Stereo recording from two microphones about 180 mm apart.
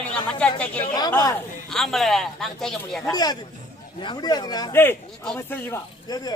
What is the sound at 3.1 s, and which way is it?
Speech, 20° left (ahead or behind).